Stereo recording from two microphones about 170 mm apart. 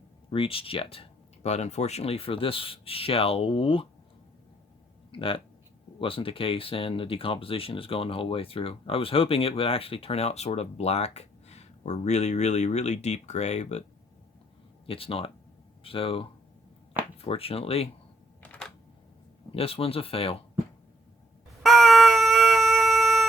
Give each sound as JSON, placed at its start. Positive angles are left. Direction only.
{"t": 0.3, "sound": "speech", "side_deg": 30}
{"t": 5.1, "sound": "speech", "side_deg": 30}
{"t": 14.8, "sound": "speech", "side_deg": 35}
{"t": 18.4, "sound": "a sound", "side_deg": 10}
{"t": 19.5, "sound": "speech", "side_deg": 35}
{"t": 21.6, "sound": "a sound", "side_deg": 0}